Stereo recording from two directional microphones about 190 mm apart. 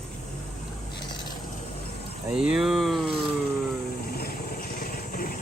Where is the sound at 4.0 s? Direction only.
55° left (ahead or behind).